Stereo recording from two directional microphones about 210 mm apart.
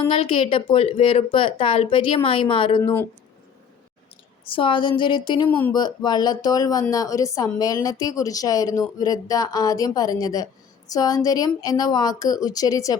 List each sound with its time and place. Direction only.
0.0 s speech: 25° left (ahead or behind)
2.8 s a woman's voice: 10° left (ahead or behind)
4.4 s speech: 25° left (ahead or behind)
5.5 s a woman's voice: 10° left (ahead or behind)
5.7 s a woman's voice: 20° left (ahead or behind)